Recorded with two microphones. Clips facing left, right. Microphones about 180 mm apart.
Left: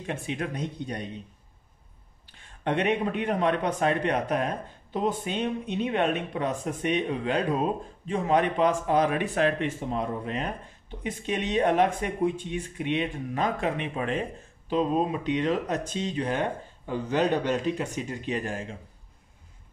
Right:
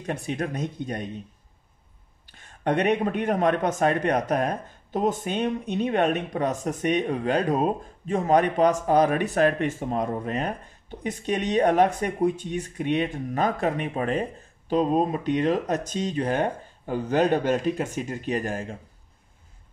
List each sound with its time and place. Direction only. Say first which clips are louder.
0.0 s a man's voice: right 3 dB; 40° right (ahead or behind)
2.3 s a man's voice: right 3 dB; 45° right (ahead or behind)